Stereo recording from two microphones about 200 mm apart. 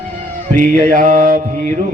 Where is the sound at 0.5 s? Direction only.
40° right (ahead or behind).